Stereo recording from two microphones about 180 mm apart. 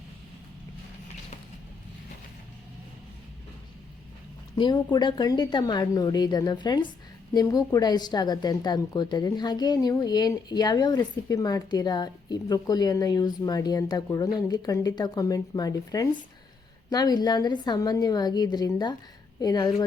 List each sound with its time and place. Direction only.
4.5 s a woman's voice: 25° left (ahead or behind)